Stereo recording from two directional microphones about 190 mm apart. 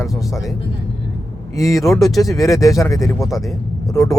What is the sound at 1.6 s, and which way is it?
Speech, 15° left (ahead or behind).